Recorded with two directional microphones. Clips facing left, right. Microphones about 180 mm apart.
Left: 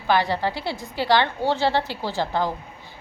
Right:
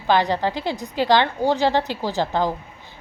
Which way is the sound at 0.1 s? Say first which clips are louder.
Right 2 dB; 20° right (ahead or behind).